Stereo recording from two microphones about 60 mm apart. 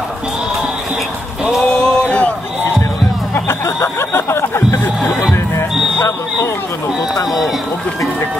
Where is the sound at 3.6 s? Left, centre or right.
Left.